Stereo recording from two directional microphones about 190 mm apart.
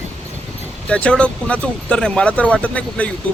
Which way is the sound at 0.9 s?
5° left (ahead or behind).